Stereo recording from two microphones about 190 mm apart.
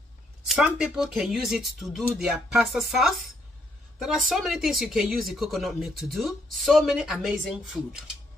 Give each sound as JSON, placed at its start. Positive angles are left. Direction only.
{"t": 0.5, "sound": "speech", "side_deg": -5}